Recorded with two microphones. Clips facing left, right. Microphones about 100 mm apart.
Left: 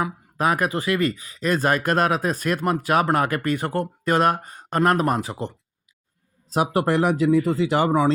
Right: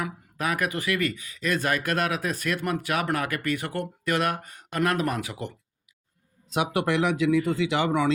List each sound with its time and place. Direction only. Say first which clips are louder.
0.0 s speech: left 7 dB; 35° left (ahead or behind)